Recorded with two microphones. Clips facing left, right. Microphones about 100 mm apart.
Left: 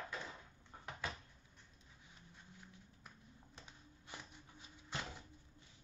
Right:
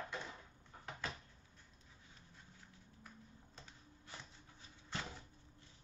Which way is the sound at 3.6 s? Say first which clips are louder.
Right 1 dB; 15° left (ahead or behind).